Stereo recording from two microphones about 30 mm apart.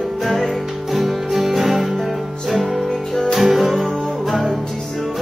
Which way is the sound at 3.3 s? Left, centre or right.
Centre.